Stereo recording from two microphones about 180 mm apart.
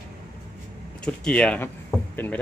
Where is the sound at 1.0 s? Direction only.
5° left (ahead or behind).